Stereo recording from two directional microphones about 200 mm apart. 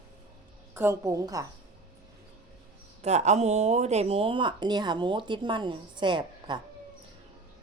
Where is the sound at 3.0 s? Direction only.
35° right (ahead or behind).